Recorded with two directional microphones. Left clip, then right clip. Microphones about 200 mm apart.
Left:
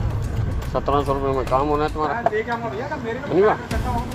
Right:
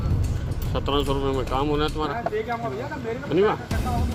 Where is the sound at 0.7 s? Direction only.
40° right (ahead or behind).